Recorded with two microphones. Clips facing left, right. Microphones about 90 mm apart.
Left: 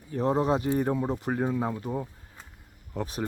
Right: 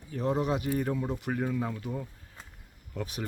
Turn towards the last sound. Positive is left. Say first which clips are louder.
# left 4 dB
turn(degrees=35)  # may be behind; listen again after turning